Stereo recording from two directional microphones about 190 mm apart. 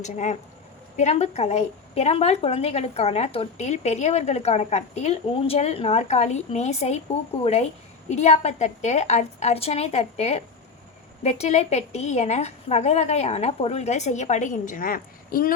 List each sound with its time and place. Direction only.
0.0 s a woman's voice: 40° left (ahead or behind)